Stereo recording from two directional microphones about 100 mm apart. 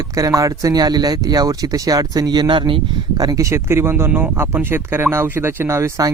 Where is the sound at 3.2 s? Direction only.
35° right (ahead or behind).